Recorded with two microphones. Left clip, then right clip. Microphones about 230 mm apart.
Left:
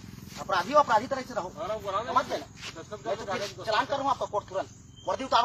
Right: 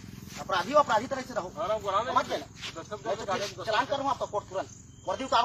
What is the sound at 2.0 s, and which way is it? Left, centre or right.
Speech, centre.